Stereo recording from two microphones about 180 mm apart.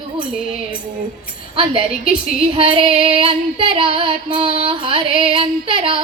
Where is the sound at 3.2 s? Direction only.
30° right (ahead or behind).